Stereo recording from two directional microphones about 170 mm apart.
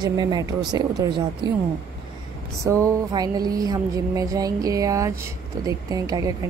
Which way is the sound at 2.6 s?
20° right (ahead or behind).